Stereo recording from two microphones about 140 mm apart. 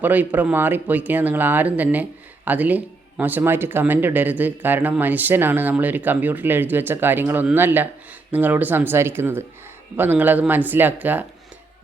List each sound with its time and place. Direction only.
0.0 s speech: 10° right (ahead or behind)